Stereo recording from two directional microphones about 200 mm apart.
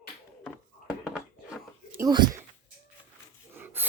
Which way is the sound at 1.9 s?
20° right (ahead or behind).